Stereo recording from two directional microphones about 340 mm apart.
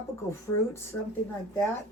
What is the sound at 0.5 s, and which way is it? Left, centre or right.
Speech, left.